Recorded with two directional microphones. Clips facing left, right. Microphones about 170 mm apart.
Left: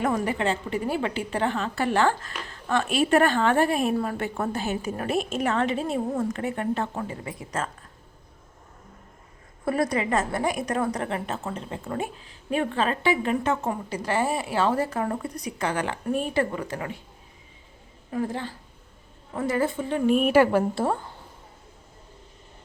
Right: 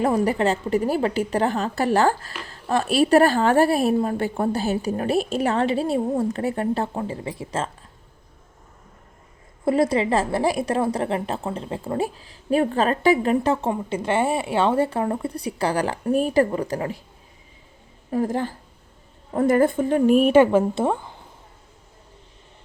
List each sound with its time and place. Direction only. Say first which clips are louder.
0.0 s a woman's voice: right 5 dB; 35° right (ahead or behind)
9.6 s a woman's voice: right 5 dB; 25° right (ahead or behind)
18.1 s a woman's voice: right 6 dB; 40° right (ahead or behind)
20.3 s a woman's voice: right 4 dB; 20° right (ahead or behind)